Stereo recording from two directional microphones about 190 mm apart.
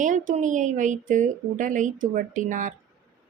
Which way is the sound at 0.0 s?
40° right (ahead or behind).